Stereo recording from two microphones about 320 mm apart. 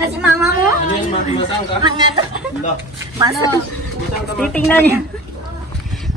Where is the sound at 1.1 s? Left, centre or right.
Centre.